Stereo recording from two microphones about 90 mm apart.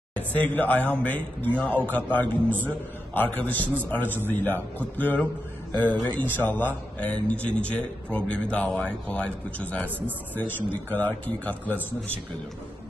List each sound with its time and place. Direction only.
0.1 s a man's voice: 15° left (ahead or behind)